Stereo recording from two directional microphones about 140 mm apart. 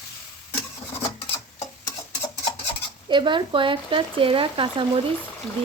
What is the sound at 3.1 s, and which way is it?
Speech, 35° right (ahead or behind).